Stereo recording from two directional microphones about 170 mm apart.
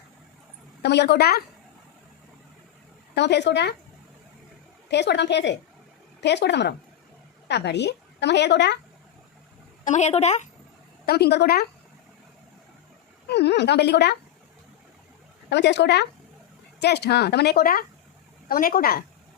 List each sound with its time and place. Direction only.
0.8 s speech: 80° left
3.2 s speech: 85° left
4.9 s a woman's voice: 85° left
9.8 s speech: 45° left (ahead or behind)
11.0 s speech: 70° left (ahead or behind)
13.2 s speech: 80° left
15.4 s a woman's voice: 90° left
16.8 s speech: 75° left (ahead or behind); by 19.0 s 60° left (ahead or behind)